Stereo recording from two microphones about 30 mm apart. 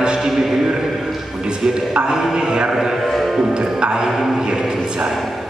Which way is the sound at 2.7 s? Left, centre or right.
Centre.